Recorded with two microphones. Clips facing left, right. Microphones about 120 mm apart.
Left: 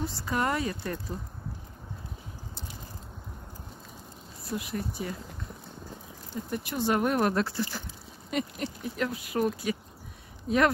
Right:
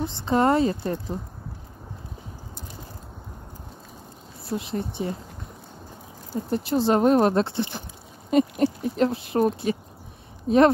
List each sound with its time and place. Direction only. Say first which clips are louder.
0.0 s speech: right 8 dB; 25° right (ahead or behind)
4.5 s speech: right 5 dB; 25° right (ahead or behind)
6.3 s speech: right 9 dB; 30° right (ahead or behind)
8.3 s a sound: right 11 dB; 30° right (ahead or behind)
8.9 s speech: right 8 dB; 30° right (ahead or behind)